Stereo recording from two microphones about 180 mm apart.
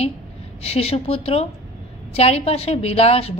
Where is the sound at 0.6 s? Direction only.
35° left (ahead or behind).